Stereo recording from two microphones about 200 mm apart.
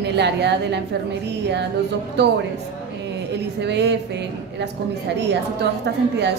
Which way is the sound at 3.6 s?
60° right (ahead or behind).